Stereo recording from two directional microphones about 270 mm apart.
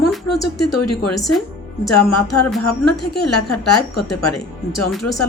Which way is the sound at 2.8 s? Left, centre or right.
Left.